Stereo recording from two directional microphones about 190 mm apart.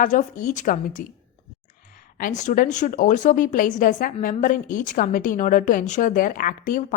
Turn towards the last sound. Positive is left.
turn(degrees=45)  # may be behind; listen again after turning